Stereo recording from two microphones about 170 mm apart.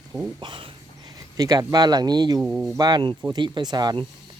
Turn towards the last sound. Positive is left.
turn(degrees=-25)  # may be behind; listen again after turning